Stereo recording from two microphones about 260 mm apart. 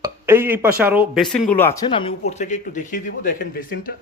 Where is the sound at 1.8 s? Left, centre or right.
Centre.